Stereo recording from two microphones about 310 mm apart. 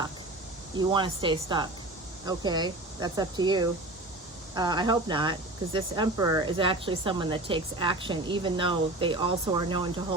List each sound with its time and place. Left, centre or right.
0.8 s speech: centre